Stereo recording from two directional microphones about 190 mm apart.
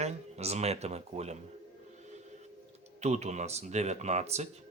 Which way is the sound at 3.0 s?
35° right (ahead or behind).